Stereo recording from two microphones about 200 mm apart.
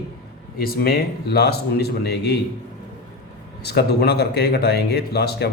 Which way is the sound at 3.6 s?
55° left (ahead or behind).